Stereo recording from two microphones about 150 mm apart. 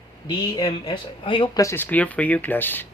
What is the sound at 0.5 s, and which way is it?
Speech, 30° left (ahead or behind).